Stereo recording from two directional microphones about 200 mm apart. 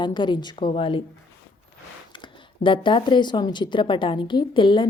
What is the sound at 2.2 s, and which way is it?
Speech, 25° left (ahead or behind).